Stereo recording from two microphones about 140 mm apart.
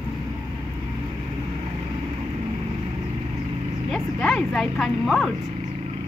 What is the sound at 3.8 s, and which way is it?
Speech, 5° left (ahead or behind).